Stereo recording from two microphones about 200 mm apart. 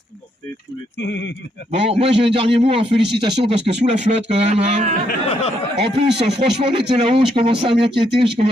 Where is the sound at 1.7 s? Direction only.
30° right (ahead or behind).